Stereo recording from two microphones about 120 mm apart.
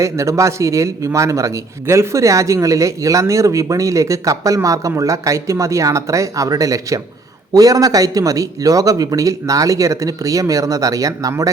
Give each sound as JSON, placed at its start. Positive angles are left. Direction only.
{"t": 0.0, "sound": "a man's voice", "side_deg": -25}